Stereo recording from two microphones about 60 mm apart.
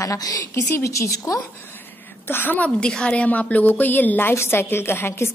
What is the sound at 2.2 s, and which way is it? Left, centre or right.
Speech, left.